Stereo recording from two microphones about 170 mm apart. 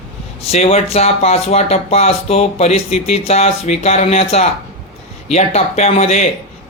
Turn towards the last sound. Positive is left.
turn(degrees=40)  # may be behind; listen again after turning